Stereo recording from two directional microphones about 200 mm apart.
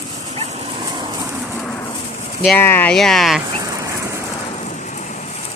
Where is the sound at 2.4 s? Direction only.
10° left (ahead or behind).